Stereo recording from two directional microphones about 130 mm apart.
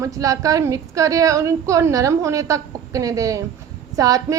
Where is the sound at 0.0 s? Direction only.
25° right (ahead or behind).